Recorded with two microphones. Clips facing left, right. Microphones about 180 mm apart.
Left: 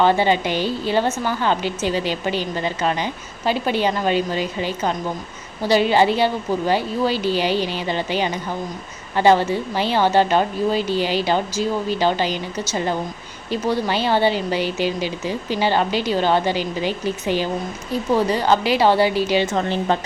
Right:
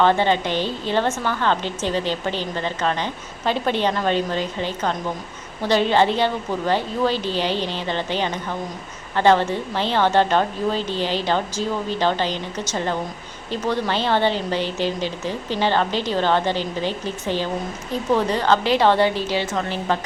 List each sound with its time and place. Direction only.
0.0 s a woman's voice: 10° left (ahead or behind)
19.5 s a woman's voice: 25° left (ahead or behind)